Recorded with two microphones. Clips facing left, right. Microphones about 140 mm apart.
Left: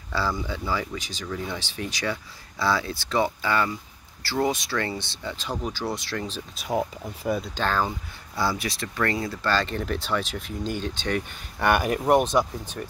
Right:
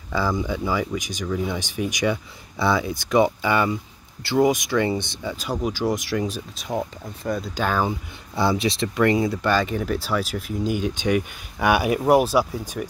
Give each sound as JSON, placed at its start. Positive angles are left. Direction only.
{"t": 0.1, "sound": "speech", "side_deg": -15}
{"t": 6.7, "sound": "speech", "side_deg": 5}
{"t": 7.5, "sound": "speech", "side_deg": -10}
{"t": 8.4, "sound": "speech", "side_deg": -20}